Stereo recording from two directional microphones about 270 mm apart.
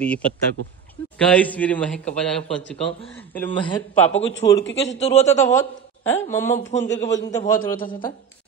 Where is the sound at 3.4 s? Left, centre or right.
Centre.